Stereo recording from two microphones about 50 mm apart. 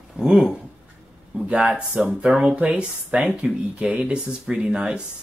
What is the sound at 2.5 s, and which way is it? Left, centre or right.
Speech, right.